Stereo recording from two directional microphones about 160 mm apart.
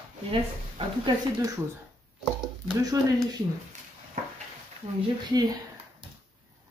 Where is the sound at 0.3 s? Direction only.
30° right (ahead or behind).